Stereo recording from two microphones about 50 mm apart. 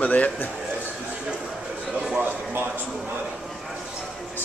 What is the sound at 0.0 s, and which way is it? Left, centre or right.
Speech, left.